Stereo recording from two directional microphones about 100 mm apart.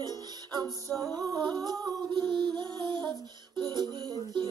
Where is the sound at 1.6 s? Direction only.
45° right (ahead or behind).